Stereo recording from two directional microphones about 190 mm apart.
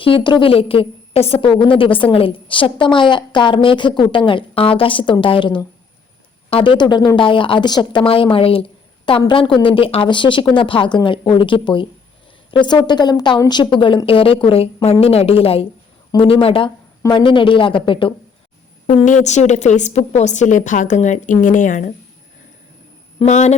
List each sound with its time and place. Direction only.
0.0 s a woman's voice: 25° left (ahead or behind)
18.9 s a woman's voice: 40° left (ahead or behind)
23.1 s a man's voice: 35° left (ahead or behind)